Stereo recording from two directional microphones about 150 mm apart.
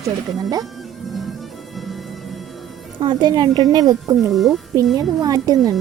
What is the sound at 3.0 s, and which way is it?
Speech, 30° right (ahead or behind).